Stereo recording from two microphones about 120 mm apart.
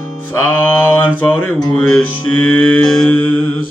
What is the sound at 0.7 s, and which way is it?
Mantra, 15° left (ahead or behind).